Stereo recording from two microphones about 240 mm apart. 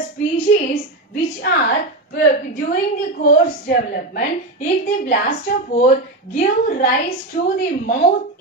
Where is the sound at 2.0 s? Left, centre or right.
Left.